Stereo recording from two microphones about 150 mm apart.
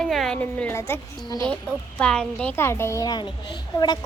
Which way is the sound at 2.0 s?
5° left (ahead or behind).